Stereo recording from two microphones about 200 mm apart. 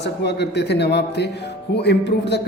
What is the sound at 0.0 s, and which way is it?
Speech, 60° left (ahead or behind).